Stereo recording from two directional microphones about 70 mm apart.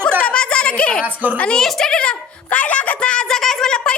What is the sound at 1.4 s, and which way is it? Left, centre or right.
Speech, centre.